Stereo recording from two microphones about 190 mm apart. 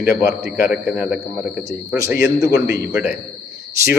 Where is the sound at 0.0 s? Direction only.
55° left (ahead or behind).